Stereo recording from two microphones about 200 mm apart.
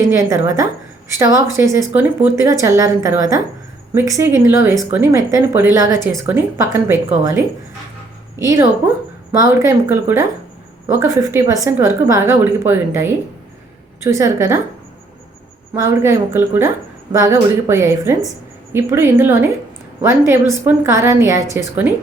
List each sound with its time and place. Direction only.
0.1 s speech: 15° right (ahead or behind)
8.4 s speech: 15° right (ahead or behind)
15.7 s speech: 15° right (ahead or behind)